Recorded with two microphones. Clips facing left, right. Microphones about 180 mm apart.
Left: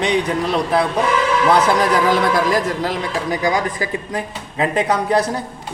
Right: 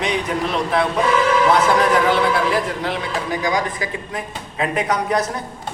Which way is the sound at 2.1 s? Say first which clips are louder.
Left 1 dB; 40° left (ahead or behind).